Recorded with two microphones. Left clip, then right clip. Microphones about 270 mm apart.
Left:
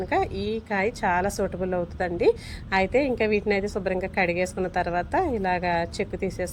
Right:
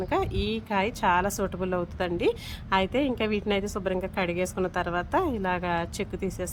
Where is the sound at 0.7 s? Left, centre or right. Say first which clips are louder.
Even; right.